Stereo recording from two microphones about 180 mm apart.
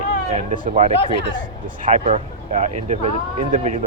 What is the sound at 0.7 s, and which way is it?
Speech, 40° right (ahead or behind).